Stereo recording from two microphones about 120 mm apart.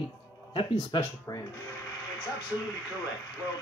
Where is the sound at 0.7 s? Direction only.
35° left (ahead or behind).